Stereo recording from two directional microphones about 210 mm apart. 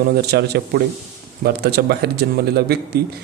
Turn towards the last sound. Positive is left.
turn(degrees=-50)  # may be behind; listen again after turning